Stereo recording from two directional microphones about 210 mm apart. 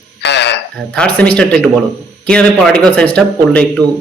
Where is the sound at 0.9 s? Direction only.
5° left (ahead or behind).